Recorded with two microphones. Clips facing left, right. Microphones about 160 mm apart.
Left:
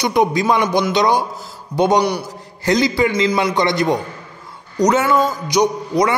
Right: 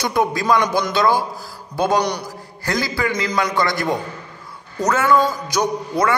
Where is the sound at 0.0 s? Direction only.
15° left (ahead or behind).